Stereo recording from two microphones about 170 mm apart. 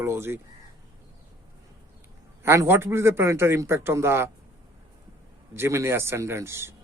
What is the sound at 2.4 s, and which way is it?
Speech, 15° right (ahead or behind).